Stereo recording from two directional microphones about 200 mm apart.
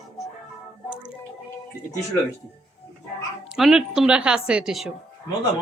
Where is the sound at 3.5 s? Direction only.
5° right (ahead or behind).